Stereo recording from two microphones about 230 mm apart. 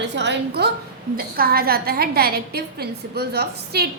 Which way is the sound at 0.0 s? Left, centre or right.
Right.